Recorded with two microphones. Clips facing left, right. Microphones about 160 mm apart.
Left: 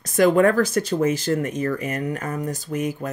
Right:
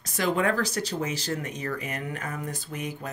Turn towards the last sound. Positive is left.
turn(degrees=45)  # may be behind; listen again after turning